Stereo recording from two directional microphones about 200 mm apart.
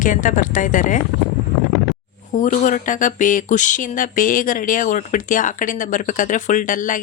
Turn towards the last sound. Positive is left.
turn(degrees=40)  # may be behind; listen again after turning